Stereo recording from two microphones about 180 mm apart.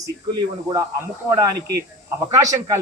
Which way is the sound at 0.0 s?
25° right (ahead or behind).